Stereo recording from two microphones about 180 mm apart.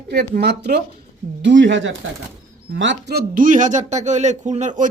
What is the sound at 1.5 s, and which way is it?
Speech, 85° right.